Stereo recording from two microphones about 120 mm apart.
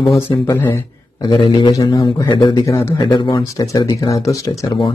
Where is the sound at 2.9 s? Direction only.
40° left (ahead or behind).